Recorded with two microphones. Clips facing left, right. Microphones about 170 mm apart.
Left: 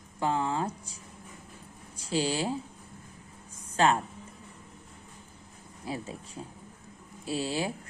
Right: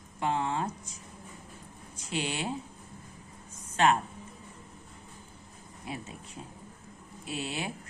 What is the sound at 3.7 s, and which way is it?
Speech, 30° left (ahead or behind).